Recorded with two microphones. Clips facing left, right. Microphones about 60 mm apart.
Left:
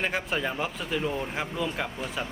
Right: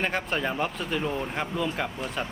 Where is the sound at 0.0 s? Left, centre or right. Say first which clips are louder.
Right 1 dB; centre.